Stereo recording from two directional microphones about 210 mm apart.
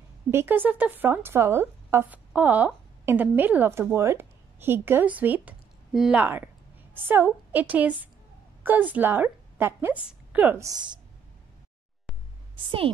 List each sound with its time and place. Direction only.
0.3 s a woman's voice: 10° right (ahead or behind)
12.5 s speech: 25° right (ahead or behind)